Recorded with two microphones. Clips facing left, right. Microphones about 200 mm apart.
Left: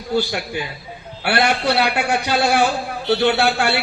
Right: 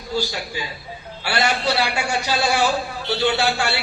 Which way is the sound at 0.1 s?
55° left (ahead or behind).